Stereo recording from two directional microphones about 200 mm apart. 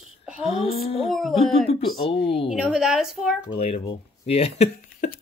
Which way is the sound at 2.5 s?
5° right (ahead or behind).